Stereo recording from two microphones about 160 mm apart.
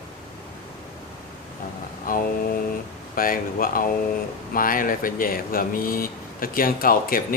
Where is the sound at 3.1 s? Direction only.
65° left (ahead or behind).